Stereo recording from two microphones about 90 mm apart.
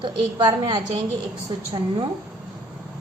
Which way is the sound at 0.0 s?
60° right (ahead or behind).